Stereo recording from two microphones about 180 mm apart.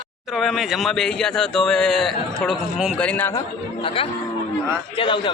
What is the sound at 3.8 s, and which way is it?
A man's voice, 30° left (ahead or behind).